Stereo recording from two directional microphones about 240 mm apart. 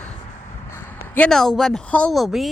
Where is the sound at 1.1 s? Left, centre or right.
Centre.